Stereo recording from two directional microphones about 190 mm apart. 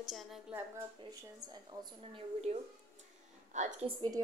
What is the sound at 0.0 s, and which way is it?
Speech, centre (ahead or behind).